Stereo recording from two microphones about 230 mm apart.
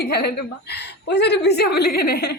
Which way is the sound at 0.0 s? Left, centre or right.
Left.